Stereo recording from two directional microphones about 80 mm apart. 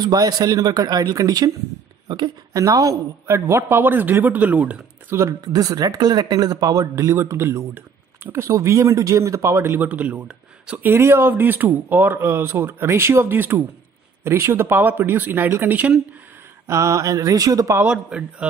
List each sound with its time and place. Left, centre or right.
0.0 s speech: right
2.0 s speech: right
2.5 s speech: right
3.3 s speech: right; by 4.8 s centre
5.4 s speech: right
7.2 s speech: right
8.5 s speech: right
9.8 s speech: centre
10.9 s speech: right
16.6 s speech: right
17.8 s a man's voice: centre